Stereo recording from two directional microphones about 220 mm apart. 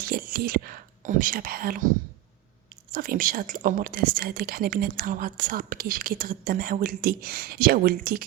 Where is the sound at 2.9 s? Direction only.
40° right (ahead or behind).